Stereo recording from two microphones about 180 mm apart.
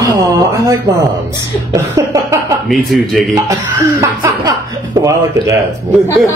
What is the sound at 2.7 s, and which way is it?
Speech, centre (ahead or behind).